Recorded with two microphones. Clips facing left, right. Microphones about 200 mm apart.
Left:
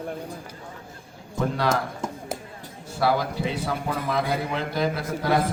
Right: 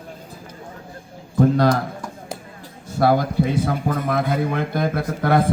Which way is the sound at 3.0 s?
50° right (ahead or behind).